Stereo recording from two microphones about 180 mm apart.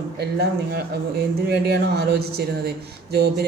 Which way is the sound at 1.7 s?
65° right (ahead or behind).